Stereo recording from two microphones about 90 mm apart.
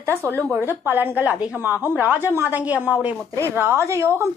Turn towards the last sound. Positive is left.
turn(degrees=-30)  # may be behind; listen again after turning